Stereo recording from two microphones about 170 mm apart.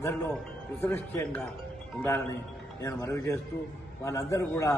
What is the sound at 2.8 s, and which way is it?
A man's voice, 20° left (ahead or behind).